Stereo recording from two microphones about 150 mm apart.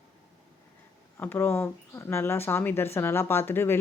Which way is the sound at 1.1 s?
15° left (ahead or behind).